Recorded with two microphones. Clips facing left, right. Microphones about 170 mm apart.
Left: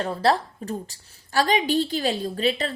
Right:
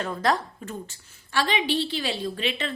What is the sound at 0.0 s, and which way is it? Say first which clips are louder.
A woman's voice: left 3 dB; 35° left (ahead or behind).